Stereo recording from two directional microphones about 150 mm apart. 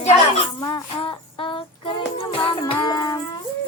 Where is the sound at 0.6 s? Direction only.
30° left (ahead or behind).